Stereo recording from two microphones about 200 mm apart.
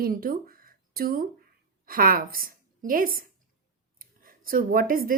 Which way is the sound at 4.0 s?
45° right (ahead or behind).